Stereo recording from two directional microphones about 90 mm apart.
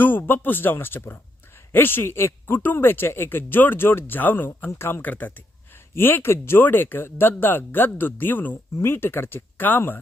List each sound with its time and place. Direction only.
0.0 s a man's voice: 20° left (ahead or behind)